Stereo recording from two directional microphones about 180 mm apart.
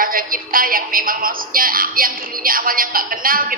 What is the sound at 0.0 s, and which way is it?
Speech, 50° right (ahead or behind).